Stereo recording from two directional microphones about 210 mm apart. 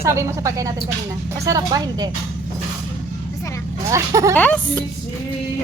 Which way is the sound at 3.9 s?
15° right (ahead or behind).